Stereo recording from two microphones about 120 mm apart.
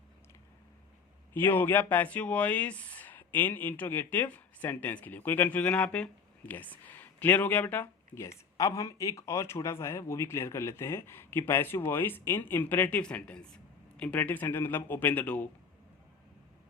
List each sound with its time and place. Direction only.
1.3 s speech: 15° left (ahead or behind)